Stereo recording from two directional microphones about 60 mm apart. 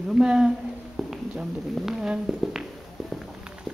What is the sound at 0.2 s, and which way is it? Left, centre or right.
Speech, centre.